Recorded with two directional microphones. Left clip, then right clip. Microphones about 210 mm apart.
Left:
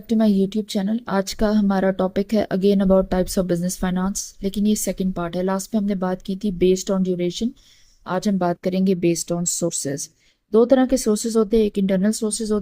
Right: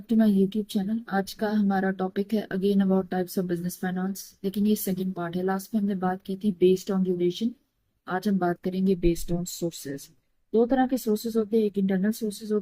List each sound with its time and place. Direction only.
0.1 s a woman's voice: 45° left (ahead or behind)